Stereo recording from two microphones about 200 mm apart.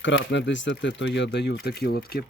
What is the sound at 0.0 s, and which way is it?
Speech, 65° left (ahead or behind).